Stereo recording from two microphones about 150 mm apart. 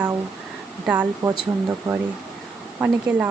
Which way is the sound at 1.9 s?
25° right (ahead or behind).